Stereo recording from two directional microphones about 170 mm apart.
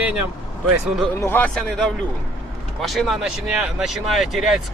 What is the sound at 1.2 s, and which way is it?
Speech, 10° left (ahead or behind).